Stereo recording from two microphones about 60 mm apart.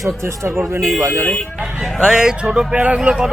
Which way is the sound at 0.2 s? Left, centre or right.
Right.